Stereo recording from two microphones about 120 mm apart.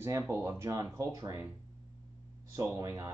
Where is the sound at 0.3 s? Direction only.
20° right (ahead or behind).